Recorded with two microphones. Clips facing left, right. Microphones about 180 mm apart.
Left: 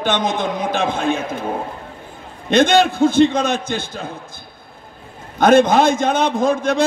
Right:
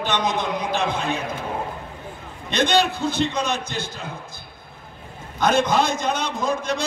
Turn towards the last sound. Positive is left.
turn(degrees=55)  # may be behind; listen again after turning